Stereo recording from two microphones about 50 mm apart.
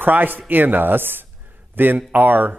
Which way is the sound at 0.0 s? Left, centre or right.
Right.